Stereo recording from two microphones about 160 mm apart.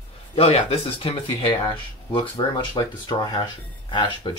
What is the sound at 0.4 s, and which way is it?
A woman's voice, 35° left (ahead or behind).